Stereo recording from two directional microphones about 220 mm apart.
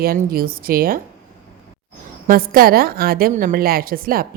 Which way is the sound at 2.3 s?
40° right (ahead or behind).